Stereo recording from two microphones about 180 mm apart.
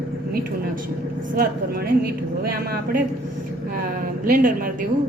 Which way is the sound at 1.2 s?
55° right (ahead or behind).